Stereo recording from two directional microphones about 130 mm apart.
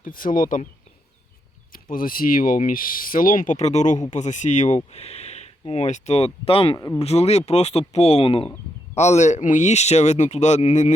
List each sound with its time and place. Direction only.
0.0 s speech: 90° left
1.7 s speech: 90° left; by 4.8 s 65° left (ahead or behind)
4.9 s speech: 55° left (ahead or behind)
6.7 s speech: 25° left (ahead or behind)
7.0 s speech: 55° left (ahead or behind)
9.0 s speech: 60° left (ahead or behind)